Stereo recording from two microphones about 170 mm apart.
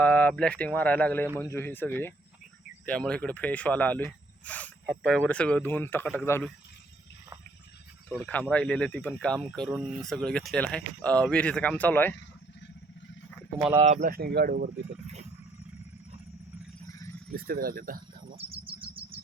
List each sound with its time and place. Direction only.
0.0 s speech: 10° left (ahead or behind)
8.1 s speech: 5° left (ahead or behind)
13.7 s speech: 40° right (ahead or behind)
14.1 s speech: 65° right (ahead or behind)
16.9 s a sound: 20° left (ahead or behind)
17.3 s speech: 60° right (ahead or behind)
18.3 s insect: 35° right (ahead or behind)
18.8 s bird vocalization: 30° right (ahead or behind)